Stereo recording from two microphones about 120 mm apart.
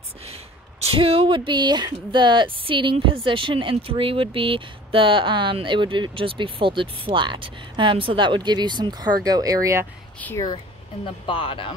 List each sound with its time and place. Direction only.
0.2 s speech: 60° right (ahead or behind); by 9.8 s 25° right (ahead or behind)
10.3 s speech: 35° left (ahead or behind)
11.2 s speech: 45° left (ahead or behind)